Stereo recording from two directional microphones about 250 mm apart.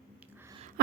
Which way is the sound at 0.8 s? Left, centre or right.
Right.